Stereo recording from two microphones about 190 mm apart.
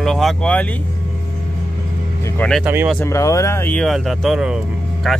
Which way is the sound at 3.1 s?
15° left (ahead or behind).